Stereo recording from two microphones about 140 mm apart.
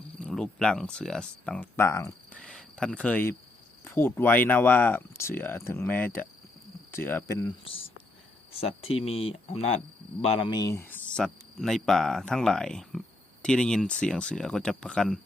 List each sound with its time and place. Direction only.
0.2 s speech: 5° left (ahead or behind)
1.7 s speech: 20° left (ahead or behind)
2.3 s speech: 5° left (ahead or behind); by 7.5 s 25° left (ahead or behind)
7.6 s speech: 40° left (ahead or behind); by 11.2 s 15° left (ahead or behind)
11.2 s speech: 5° left (ahead or behind)